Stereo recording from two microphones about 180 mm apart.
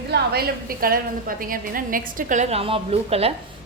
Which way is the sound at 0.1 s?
60° right (ahead or behind).